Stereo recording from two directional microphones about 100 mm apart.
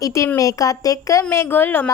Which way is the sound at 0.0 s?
30° left (ahead or behind).